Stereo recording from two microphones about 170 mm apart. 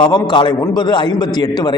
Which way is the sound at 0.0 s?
25° left (ahead or behind).